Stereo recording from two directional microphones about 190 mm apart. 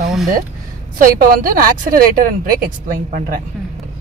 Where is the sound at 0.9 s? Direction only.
45° right (ahead or behind).